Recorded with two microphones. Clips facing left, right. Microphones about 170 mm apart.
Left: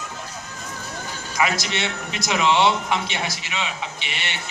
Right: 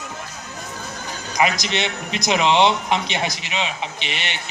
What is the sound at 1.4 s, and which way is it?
A man's voice, 20° right (ahead or behind).